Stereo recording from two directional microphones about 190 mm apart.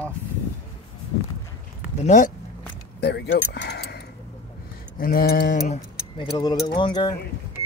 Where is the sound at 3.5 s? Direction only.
60° left (ahead or behind).